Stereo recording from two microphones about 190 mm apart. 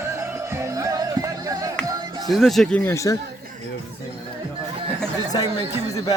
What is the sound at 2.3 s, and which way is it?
Speech, centre (ahead or behind).